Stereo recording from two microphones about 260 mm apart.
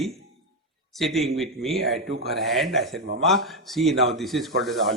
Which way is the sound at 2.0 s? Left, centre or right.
Right.